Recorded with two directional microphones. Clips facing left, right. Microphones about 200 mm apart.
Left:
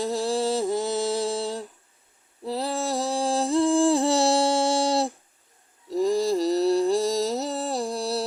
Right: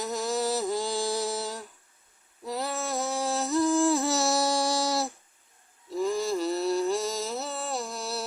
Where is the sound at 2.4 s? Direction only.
30° left (ahead or behind).